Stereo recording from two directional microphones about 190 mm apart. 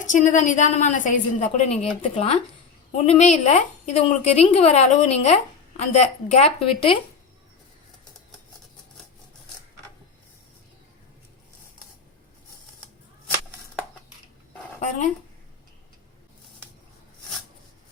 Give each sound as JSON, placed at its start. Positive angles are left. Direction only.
{"t": 0.1, "sound": "a woman's voice", "side_deg": 40}
{"t": 14.8, "sound": "a woman's voice", "side_deg": 40}